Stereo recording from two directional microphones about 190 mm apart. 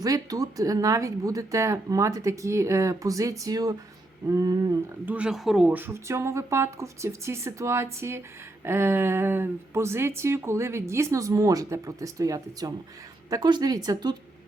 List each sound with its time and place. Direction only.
0.0 s speech: 20° right (ahead or behind)
5.0 s speech: 5° right (ahead or behind)